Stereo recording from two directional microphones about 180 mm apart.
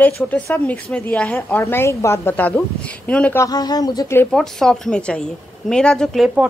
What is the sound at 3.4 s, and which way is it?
Speech, 20° left (ahead or behind).